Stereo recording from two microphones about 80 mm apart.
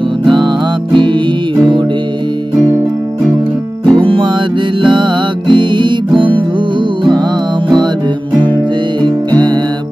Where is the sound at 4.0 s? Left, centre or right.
Right.